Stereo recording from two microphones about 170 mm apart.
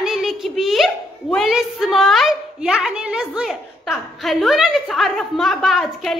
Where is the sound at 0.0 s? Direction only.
Centre (ahead or behind).